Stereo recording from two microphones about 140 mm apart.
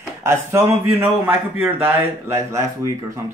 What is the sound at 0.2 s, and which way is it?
A man's voice, 20° right (ahead or behind).